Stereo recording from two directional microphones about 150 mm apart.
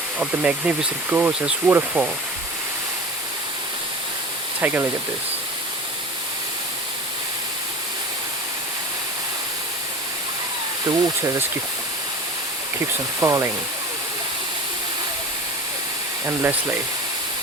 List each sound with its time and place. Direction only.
0.2 s speech: 10° right (ahead or behind)
4.6 s speech: 15° right (ahead or behind)
10.8 s speech: 25° right (ahead or behind)
13.1 s speech: 20° right (ahead or behind)
16.2 s speech: 15° right (ahead or behind)